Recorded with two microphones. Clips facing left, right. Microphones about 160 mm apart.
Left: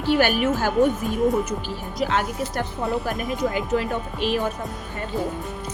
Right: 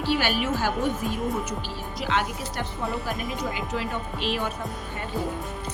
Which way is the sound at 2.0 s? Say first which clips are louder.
Left 4 dB; 45° left (ahead or behind).